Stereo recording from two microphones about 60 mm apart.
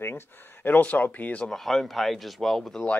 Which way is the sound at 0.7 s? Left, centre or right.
Left.